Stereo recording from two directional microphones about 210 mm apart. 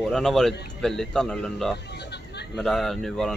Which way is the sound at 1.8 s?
55° left (ahead or behind).